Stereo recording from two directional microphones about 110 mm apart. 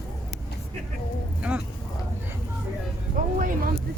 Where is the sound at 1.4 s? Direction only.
10° right (ahead or behind).